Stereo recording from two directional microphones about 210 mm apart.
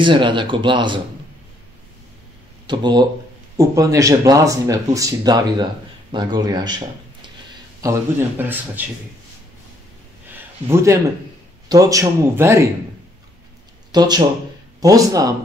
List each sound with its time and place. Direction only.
0.0 s speech: 25° right (ahead or behind)
2.6 s speech: 20° right (ahead or behind)
7.8 s speech: 10° right (ahead or behind)
10.3 s a sound: 15° right (ahead or behind)
11.7 s speech: 15° right (ahead or behind)
13.9 s speech: 20° right (ahead or behind)